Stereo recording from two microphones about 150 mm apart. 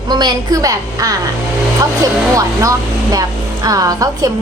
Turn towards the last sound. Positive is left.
turn(degrees=-25)  # may be behind; listen again after turning